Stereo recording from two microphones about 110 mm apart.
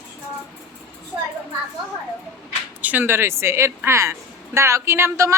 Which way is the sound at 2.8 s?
15° right (ahead or behind).